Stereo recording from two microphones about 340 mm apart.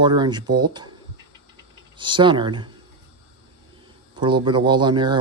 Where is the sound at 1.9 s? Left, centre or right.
Centre.